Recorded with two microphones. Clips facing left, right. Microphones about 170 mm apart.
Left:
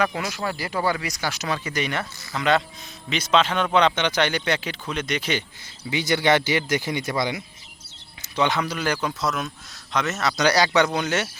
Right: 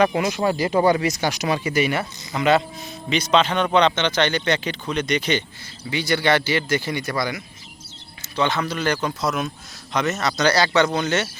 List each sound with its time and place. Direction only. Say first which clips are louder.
0.0 s speech: right 6 dB; 20° right (ahead or behind); by 5.4 s 5° left (ahead or behind)
5.9 s speech: even; 20° left (ahead or behind)
9.0 s speech: right 2 dB; centre (ahead or behind)